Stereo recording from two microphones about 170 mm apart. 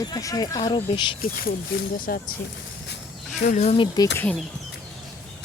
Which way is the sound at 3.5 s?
40° left (ahead or behind).